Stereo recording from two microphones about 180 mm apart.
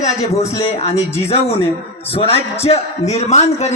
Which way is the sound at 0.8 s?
35° left (ahead or behind).